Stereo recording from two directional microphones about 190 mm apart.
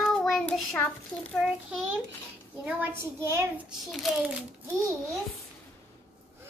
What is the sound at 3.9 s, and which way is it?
Speech, centre (ahead or behind).